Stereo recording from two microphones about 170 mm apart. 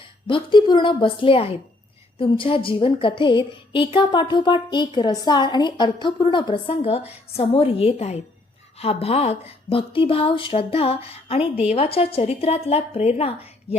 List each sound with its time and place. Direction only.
0.3 s a woman's voice: 30° left (ahead or behind)